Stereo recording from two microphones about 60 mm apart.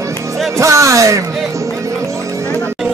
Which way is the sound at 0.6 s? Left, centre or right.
Right.